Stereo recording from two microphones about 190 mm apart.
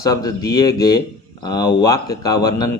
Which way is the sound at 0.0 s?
20° left (ahead or behind).